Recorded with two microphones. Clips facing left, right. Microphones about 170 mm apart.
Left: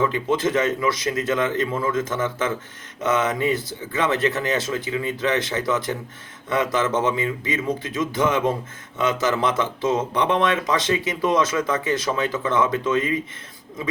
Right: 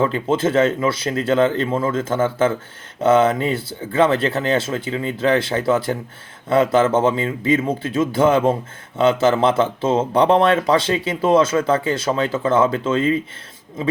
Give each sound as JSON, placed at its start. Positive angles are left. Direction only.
{"t": 0.0, "sound": "a man's voice", "side_deg": -30}